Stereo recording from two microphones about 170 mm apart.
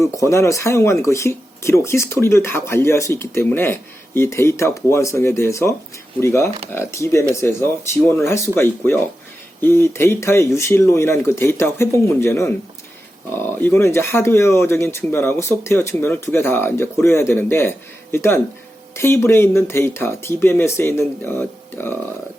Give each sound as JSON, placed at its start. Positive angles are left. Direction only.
{"t": 0.0, "sound": "speech", "side_deg": 15}